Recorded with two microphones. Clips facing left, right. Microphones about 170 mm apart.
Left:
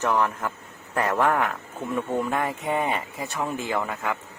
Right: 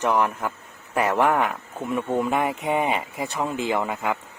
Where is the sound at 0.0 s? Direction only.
20° right (ahead or behind).